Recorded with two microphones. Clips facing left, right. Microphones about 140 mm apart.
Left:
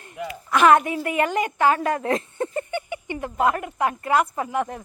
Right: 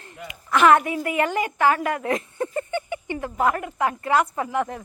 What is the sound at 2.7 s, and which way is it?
A woman's voice, 15° left (ahead or behind).